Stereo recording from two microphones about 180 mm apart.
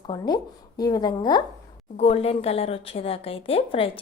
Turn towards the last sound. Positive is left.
turn(degrees=30)  # may be behind; listen again after turning